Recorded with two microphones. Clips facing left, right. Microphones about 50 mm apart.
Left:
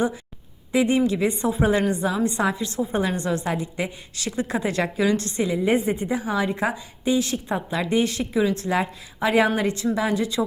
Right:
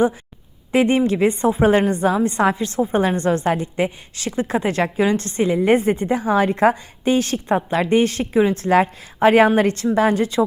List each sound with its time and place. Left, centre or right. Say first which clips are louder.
0.7 s a woman's voice: right 4 dB; right
5.6 s a woman's voice: right 5 dB; right